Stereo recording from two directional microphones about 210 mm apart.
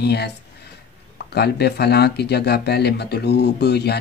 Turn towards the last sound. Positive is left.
turn(degrees=50)  # may be behind; listen again after turning